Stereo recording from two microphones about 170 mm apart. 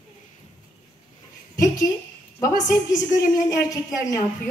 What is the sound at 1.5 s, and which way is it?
A woman's voice, 20° left (ahead or behind).